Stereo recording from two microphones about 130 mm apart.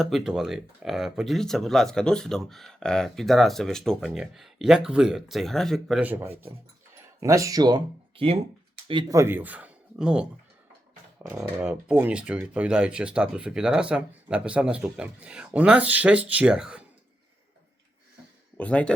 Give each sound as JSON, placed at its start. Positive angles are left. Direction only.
{"t": 0.0, "sound": "speech", "side_deg": -5}
{"t": 6.0, "sound": "speech", "side_deg": -15}
{"t": 9.0, "sound": "speech", "side_deg": -20}
{"t": 11.3, "sound": "speech", "side_deg": -5}
{"t": 18.5, "sound": "speech", "side_deg": 10}